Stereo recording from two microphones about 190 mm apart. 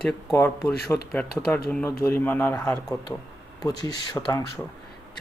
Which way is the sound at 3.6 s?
20° left (ahead or behind).